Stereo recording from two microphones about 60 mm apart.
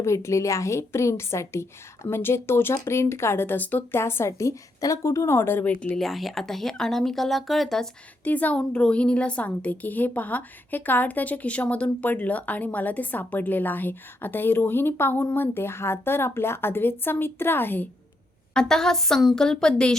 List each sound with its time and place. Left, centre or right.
0.0 s a woman's voice: left
2.0 s a woman's voice: left
3.9 s a woman's voice: left
6.0 s speech: centre
8.2 s a woman's voice: left
18.5 s a woman's voice: centre
19.4 s a woman's voice: centre